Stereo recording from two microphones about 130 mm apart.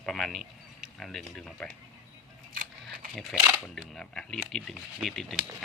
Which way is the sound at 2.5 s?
90° right.